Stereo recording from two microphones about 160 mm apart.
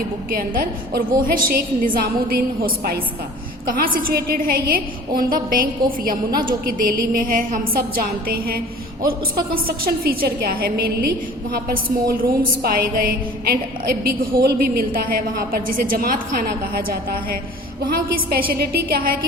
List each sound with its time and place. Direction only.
0.3 s a woman's voice: 65° right (ahead or behind)